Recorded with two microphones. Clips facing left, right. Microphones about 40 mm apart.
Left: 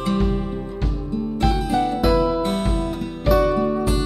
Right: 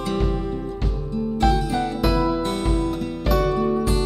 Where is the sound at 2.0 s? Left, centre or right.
Centre.